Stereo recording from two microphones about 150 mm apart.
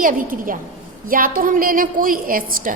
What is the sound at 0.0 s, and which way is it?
A woman's voice, 65° right (ahead or behind).